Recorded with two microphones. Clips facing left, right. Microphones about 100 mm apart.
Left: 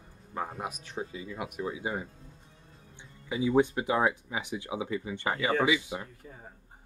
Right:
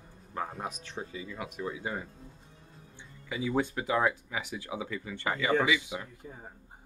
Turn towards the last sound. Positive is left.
turn(degrees=-20)  # may be behind; listen again after turning